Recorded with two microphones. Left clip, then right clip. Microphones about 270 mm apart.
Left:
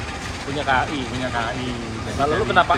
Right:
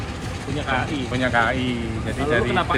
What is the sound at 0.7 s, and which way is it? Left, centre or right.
Speech, left.